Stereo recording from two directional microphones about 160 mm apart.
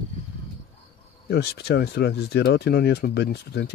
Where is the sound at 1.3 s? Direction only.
85° left.